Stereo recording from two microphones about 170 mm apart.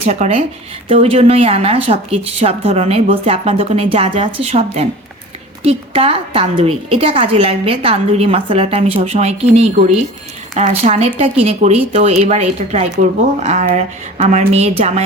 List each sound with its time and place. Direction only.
0.0 s a woman's voice: 40° right (ahead or behind)